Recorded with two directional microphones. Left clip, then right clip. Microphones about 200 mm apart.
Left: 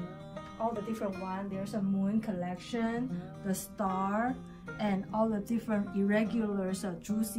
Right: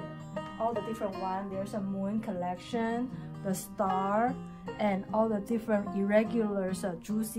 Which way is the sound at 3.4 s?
35° right (ahead or behind).